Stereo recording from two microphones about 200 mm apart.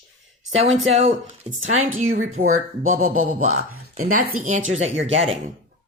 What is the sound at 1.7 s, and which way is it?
Speech, 40° right (ahead or behind).